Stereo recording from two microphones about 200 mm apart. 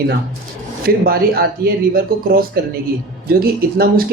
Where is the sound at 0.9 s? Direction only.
50° right (ahead or behind).